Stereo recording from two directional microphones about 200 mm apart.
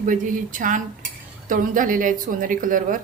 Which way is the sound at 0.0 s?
40° right (ahead or behind).